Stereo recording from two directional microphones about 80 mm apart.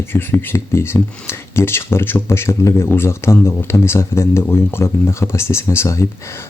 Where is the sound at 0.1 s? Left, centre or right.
Left.